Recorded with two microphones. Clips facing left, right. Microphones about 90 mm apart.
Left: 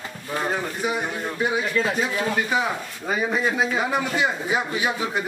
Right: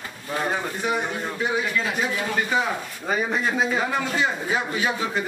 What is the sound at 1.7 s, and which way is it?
Speech, 35° left (ahead or behind).